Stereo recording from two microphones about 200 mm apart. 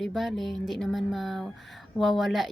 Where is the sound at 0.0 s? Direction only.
Centre (ahead or behind).